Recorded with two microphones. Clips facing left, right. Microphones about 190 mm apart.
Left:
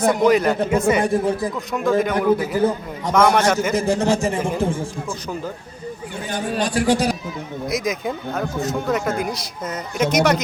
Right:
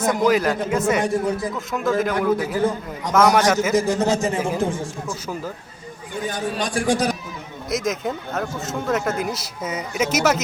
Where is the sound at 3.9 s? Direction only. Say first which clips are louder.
Left 1 dB; 30° left (ahead or behind).